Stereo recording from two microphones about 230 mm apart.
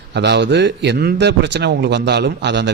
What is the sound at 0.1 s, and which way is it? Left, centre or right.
A man's voice, right.